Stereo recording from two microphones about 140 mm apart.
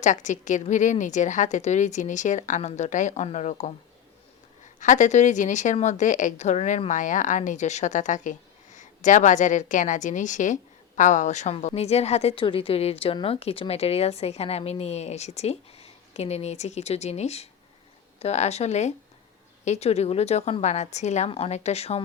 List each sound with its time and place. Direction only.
0.0 s speech: 60° left (ahead or behind)
4.8 s a woman's voice: 60° left (ahead or behind)
21.2 s a woman's voice: 45° left (ahead or behind)